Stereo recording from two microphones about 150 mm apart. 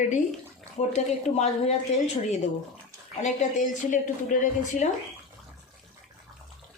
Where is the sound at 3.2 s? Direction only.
55° left (ahead or behind).